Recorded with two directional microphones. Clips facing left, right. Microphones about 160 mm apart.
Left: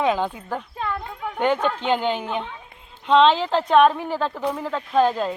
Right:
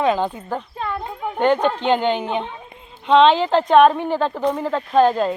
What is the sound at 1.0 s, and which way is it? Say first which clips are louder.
Speech: right 4 dB; 25° right (ahead or behind).